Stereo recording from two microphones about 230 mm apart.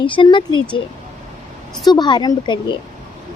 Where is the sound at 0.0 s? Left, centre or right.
Left.